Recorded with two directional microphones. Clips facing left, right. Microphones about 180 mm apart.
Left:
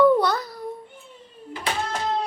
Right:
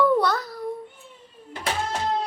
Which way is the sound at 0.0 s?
Centre (ahead or behind).